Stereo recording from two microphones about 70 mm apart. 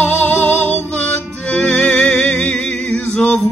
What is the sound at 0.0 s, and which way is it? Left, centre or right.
Music, left.